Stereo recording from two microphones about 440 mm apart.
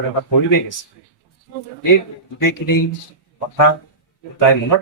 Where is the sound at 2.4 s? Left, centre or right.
Left.